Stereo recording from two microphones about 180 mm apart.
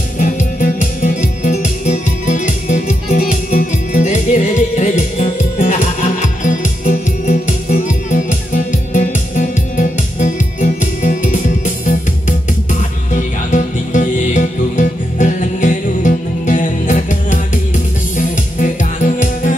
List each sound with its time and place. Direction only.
0.2 s music: 45° left (ahead or behind)